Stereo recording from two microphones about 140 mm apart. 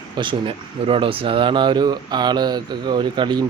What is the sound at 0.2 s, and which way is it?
Speech, 35° right (ahead or behind).